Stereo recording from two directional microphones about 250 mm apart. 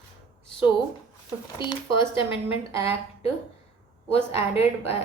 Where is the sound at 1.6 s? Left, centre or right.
Centre.